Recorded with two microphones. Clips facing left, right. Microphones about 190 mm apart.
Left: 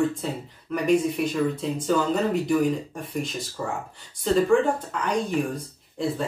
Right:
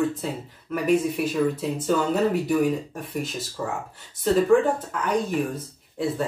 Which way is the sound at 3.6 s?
Centre (ahead or behind).